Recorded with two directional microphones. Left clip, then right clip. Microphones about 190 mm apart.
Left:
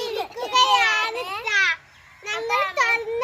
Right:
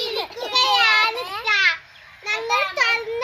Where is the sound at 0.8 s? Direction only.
10° left (ahead or behind).